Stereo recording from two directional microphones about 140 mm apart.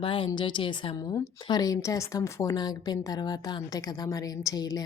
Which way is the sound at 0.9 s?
25° left (ahead or behind).